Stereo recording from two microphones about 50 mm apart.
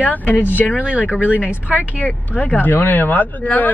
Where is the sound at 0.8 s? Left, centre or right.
Right.